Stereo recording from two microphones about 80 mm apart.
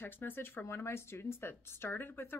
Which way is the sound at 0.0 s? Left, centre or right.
Left.